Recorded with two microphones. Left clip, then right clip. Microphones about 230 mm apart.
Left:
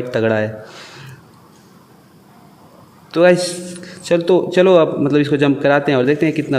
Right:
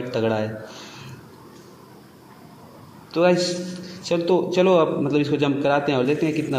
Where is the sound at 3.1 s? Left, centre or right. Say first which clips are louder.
Left 6 dB; left.